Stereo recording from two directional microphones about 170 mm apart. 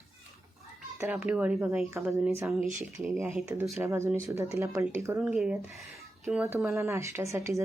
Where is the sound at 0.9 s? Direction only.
10° right (ahead or behind).